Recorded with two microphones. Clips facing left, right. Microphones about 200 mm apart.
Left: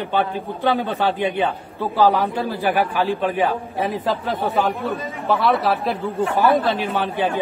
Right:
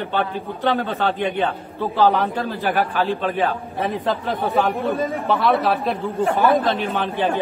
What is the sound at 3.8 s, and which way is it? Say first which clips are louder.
Speech: even; centre (ahead or behind).